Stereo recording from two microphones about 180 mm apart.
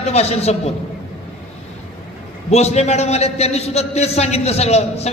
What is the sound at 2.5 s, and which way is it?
A man's voice, 35° left (ahead or behind).